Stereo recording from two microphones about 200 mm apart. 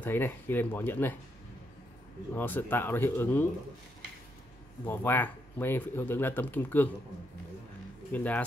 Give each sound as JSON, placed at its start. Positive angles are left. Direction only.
{"t": 0.0, "sound": "speech", "side_deg": 10}
{"t": 2.3, "sound": "speech", "side_deg": 10}
{"t": 4.8, "sound": "speech", "side_deg": 10}
{"t": 8.1, "sound": "speech", "side_deg": 5}